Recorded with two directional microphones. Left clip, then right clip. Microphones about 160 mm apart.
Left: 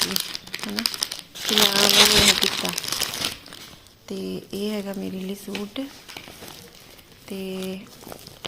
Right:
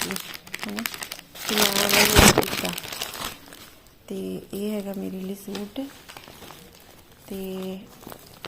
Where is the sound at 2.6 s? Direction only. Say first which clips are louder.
Left 2 dB; 5° right (ahead or behind).